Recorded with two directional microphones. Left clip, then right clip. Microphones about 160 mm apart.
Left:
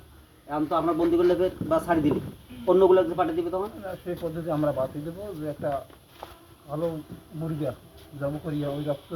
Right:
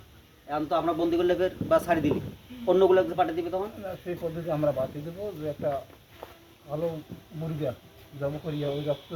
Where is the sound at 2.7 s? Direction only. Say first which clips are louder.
Left 2 dB; 30° left (ahead or behind).